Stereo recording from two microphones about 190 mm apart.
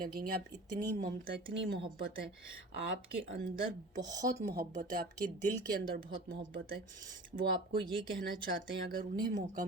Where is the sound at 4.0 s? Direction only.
20° right (ahead or behind).